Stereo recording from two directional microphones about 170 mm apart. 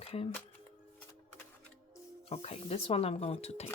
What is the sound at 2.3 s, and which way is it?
Speech, 35° left (ahead or behind).